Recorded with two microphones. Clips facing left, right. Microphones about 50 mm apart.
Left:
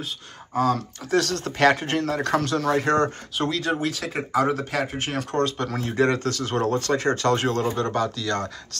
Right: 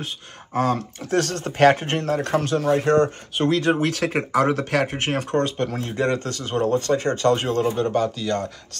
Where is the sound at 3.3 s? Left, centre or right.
Right.